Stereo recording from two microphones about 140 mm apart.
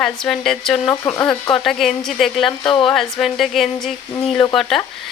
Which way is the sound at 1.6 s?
Centre (ahead or behind).